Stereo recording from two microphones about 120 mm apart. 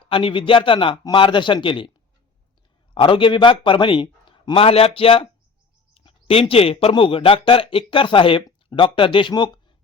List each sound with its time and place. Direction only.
0.1 s a man's voice: 50° left (ahead or behind)
2.9 s a man's voice: 45° left (ahead or behind)